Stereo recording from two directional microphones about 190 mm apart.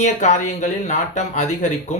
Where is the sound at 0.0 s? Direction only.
40° left (ahead or behind).